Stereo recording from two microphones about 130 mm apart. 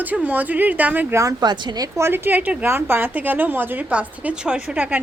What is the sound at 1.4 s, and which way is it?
A woman's voice, 35° right (ahead or behind).